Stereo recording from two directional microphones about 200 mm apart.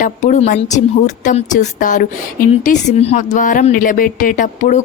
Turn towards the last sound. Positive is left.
turn(degrees=40)  # may be behind; listen again after turning